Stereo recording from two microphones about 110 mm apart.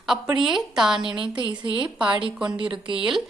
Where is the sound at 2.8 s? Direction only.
50° right (ahead or behind).